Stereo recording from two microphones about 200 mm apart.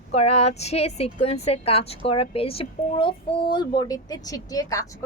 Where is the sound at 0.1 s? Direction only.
30° left (ahead or behind).